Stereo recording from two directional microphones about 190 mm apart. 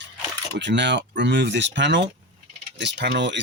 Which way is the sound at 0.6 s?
65° right (ahead or behind).